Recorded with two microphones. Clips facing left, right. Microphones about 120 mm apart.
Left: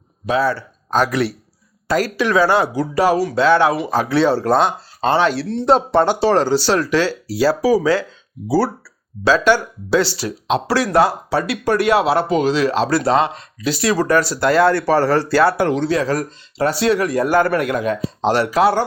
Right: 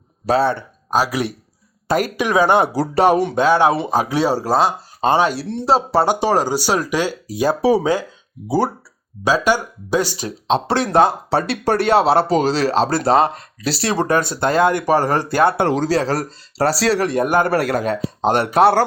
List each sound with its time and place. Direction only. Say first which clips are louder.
0.3 s speech: right 1 dB; 30° right (ahead or behind)
0.9 s speech: left 2 dB; 10° right (ahead or behind)
2.7 s speech: right 1 dB; 35° right (ahead or behind)
3.1 s speech: left 2 dB; 20° right (ahead or behind)
10.2 s speech: right 1 dB; 25° right (ahead or behind)
13.0 s speech: right 1 dB; 40° right (ahead or behind); by 15.7 s 25° right (ahead or behind)
15.7 s speech: even; 35° right (ahead or behind); by 17.5 s 20° right (ahead or behind)
17.5 s speech: even; 35° right (ahead or behind)
18.3 s speech: right 1 dB; 55° right (ahead or behind)